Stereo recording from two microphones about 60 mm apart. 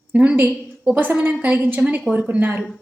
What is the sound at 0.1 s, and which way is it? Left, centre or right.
Speech, centre.